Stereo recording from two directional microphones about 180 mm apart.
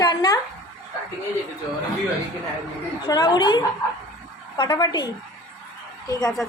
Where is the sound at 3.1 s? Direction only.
25° left (ahead or behind).